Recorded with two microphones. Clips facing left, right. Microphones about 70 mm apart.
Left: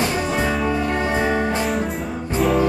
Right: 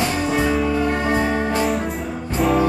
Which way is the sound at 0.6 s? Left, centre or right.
Centre.